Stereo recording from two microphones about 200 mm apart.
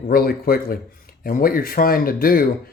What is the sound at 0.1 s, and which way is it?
Speech, 50° left (ahead or behind).